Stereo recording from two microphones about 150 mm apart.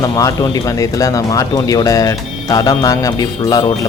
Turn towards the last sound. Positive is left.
turn(degrees=25)  # may be behind; listen again after turning